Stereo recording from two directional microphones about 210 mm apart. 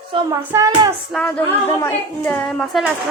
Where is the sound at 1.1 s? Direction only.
5° left (ahead or behind).